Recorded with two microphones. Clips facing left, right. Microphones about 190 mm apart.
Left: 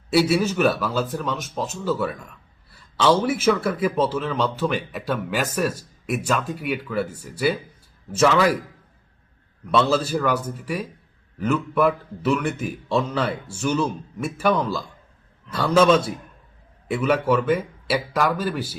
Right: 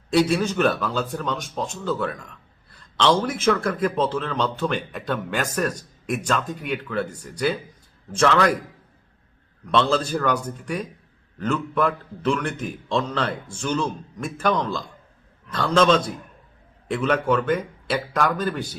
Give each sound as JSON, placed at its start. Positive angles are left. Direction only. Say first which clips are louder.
{"t": 0.1, "sound": "speech", "louder": "left 1 dB", "side_deg": 5}
{"t": 9.6, "sound": "speech", "louder": "left 1 dB", "side_deg": 5}